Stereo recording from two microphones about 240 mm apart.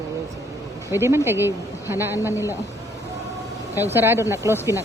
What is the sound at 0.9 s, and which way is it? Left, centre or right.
Speech, centre.